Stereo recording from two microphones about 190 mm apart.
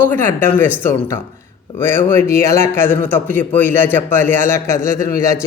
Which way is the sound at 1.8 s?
10° left (ahead or behind).